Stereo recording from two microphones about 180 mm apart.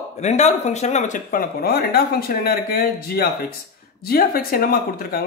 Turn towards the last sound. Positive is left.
turn(degrees=55)  # may be behind; listen again after turning